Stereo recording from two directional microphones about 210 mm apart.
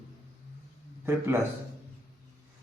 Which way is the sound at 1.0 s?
10° right (ahead or behind).